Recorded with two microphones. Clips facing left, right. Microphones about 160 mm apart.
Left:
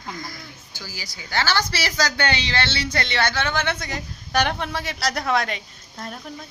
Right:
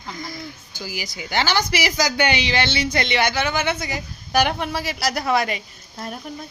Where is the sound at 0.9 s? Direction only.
15° right (ahead or behind).